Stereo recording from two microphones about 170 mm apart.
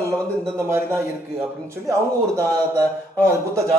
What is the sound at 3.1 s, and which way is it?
Speech, 15° right (ahead or behind).